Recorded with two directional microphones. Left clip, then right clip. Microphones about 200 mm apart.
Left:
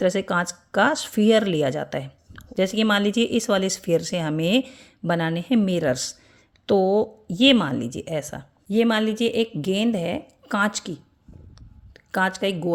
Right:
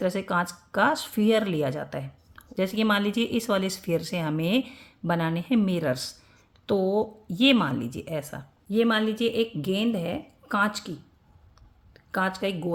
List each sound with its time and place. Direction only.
0.0 s speech: 30° left (ahead or behind)
11.9 s speech: 35° left (ahead or behind)